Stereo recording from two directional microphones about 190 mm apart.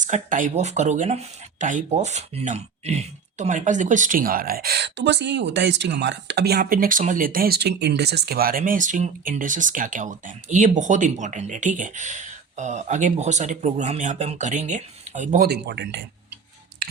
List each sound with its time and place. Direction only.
0.0 s speech: 40° right (ahead or behind)
15.4 s speech: 60° right (ahead or behind)